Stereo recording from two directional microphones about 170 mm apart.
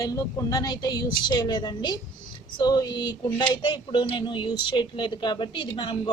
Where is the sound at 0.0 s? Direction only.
20° left (ahead or behind).